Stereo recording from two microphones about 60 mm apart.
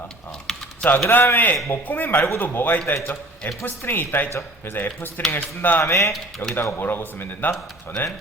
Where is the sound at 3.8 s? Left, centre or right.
Left.